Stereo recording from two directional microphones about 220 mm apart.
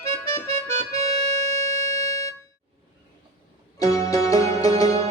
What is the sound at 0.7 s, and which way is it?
Accordion, 25° right (ahead or behind).